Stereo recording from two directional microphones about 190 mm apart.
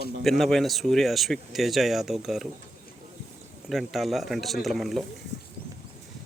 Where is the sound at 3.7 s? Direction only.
Centre (ahead or behind).